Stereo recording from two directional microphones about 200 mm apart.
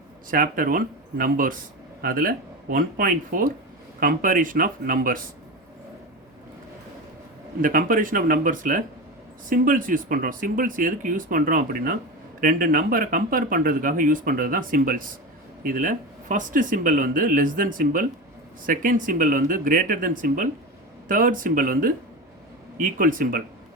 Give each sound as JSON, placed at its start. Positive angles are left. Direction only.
{"t": 0.3, "sound": "speech", "side_deg": -45}
{"t": 7.6, "sound": "speech", "side_deg": -45}